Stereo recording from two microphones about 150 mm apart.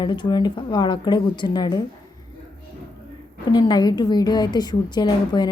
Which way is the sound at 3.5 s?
30° left (ahead or behind).